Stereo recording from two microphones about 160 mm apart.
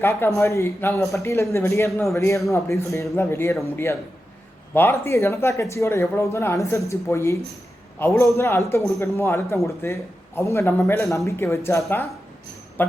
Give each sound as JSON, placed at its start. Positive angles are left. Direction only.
{"t": 0.0, "sound": "speech", "side_deg": 15}